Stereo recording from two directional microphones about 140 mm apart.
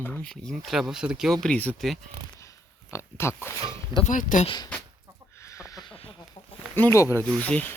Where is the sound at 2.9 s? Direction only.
20° left (ahead or behind).